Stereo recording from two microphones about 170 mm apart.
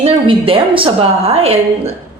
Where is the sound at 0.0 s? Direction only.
30° right (ahead or behind).